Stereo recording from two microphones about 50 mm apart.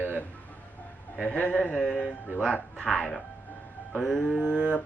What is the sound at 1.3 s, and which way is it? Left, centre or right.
A man's voice, left.